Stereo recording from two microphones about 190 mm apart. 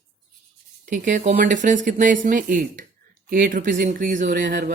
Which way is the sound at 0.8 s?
45° right (ahead or behind).